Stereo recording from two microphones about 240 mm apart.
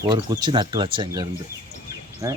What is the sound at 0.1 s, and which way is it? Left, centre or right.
Speech, centre.